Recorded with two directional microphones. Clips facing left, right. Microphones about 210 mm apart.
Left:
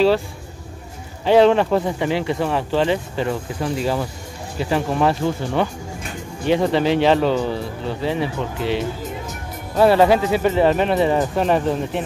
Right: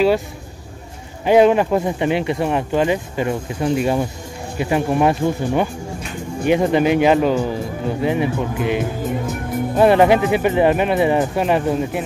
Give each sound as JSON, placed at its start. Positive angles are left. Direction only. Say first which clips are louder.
{"t": 1.2, "sound": "speech", "louder": "right 1 dB", "side_deg": -15}